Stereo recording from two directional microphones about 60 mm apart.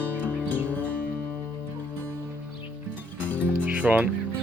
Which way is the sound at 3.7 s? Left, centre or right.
Right.